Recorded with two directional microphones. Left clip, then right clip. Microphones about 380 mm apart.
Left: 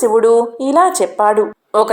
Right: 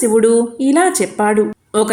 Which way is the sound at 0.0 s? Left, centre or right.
Right.